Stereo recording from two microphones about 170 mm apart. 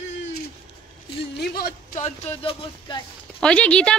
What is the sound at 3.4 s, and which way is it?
Speech, 5° left (ahead or behind).